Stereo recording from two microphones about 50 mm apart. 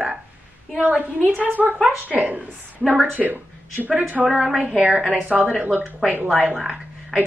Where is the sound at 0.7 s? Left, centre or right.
Centre.